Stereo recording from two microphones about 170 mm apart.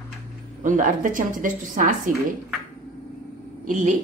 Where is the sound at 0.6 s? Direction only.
50° right (ahead or behind).